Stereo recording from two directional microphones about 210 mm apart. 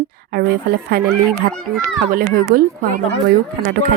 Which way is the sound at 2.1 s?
40° right (ahead or behind).